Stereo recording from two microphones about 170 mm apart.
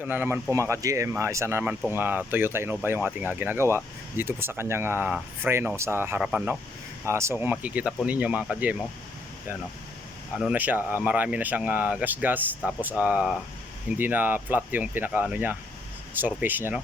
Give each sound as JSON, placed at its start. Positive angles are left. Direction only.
{"t": 0.0, "sound": "speech", "side_deg": -10}
{"t": 10.3, "sound": "speech", "side_deg": -10}